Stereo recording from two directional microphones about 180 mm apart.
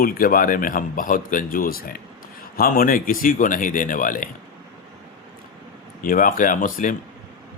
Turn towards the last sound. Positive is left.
turn(degrees=45)  # may be behind; listen again after turning